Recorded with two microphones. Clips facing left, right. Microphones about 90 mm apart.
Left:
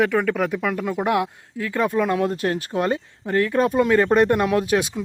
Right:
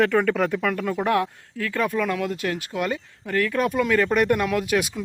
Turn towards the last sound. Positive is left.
turn(degrees=30)  # may be behind; listen again after turning